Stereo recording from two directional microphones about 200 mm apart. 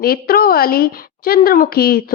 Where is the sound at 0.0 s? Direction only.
50° left (ahead or behind).